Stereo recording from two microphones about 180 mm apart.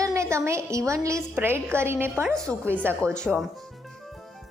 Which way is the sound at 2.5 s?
5° left (ahead or behind).